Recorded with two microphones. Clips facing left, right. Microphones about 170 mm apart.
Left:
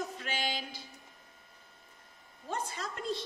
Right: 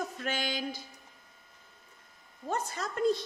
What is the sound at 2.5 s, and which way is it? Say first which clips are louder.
Speech: right 3 dB; 45° right (ahead or behind).